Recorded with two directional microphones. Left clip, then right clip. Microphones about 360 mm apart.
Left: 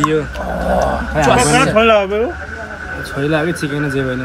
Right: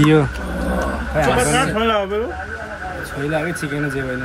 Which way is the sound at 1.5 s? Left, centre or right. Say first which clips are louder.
Left 7 dB; left.